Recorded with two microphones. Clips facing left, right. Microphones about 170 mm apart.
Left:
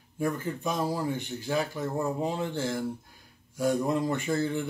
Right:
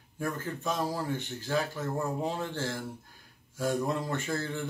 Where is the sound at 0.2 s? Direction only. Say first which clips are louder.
Left 4 dB; 15° left (ahead or behind).